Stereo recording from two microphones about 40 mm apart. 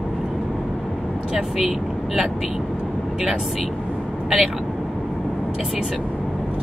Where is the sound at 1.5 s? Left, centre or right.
Centre.